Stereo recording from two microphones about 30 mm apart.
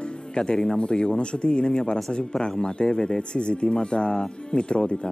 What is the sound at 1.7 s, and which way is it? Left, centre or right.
Speech, left.